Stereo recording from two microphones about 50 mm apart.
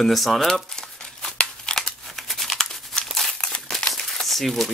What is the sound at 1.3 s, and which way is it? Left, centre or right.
Scissors, centre.